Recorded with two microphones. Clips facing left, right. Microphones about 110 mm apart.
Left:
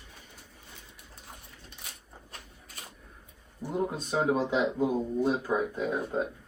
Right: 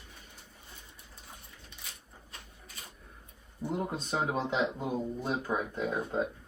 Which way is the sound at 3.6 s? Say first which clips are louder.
Left 3 dB; 5° left (ahead or behind).